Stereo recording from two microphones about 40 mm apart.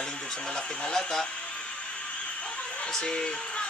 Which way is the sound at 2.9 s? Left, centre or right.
Centre.